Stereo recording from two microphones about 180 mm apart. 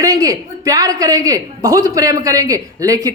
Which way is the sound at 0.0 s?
20° right (ahead or behind).